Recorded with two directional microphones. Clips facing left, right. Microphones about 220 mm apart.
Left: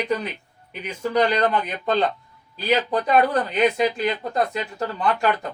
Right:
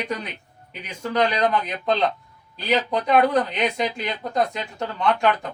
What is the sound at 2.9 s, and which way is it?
Speech, 5° left (ahead or behind).